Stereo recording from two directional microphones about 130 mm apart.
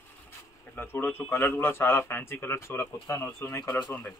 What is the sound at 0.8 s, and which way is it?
A man's voice, 15° left (ahead or behind).